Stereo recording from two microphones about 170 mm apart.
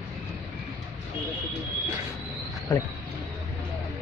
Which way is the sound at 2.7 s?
20° left (ahead or behind).